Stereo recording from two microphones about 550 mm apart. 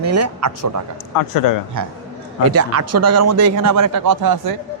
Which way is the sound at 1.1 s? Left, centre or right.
Left.